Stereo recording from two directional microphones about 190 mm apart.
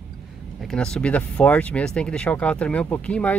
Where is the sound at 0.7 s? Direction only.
5° left (ahead or behind).